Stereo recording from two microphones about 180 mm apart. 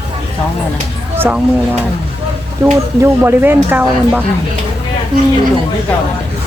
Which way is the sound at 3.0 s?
15° right (ahead or behind).